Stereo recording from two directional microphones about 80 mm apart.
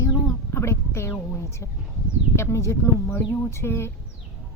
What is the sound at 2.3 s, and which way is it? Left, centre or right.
Speech, left.